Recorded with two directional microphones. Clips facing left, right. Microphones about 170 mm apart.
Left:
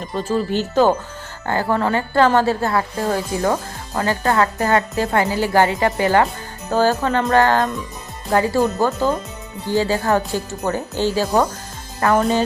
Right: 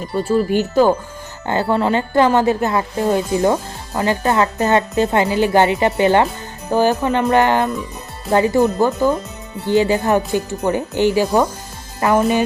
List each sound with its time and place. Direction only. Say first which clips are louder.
0.1 s speech: right 4 dB; 10° right (ahead or behind)
1.7 s a woman's voice: right 3 dB; 20° right (ahead or behind)